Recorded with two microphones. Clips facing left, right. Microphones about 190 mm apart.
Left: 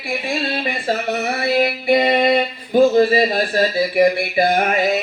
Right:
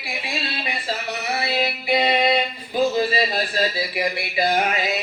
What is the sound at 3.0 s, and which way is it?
Speech, 50° left (ahead or behind).